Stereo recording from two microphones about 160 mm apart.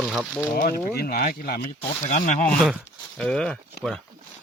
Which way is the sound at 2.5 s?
5° left (ahead or behind).